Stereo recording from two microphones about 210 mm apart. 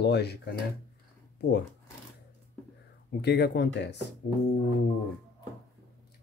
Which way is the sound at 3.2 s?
50° left (ahead or behind).